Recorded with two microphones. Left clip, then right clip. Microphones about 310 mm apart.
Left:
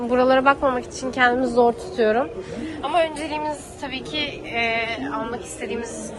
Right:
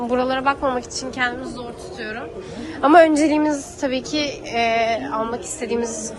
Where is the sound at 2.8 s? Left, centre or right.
Right.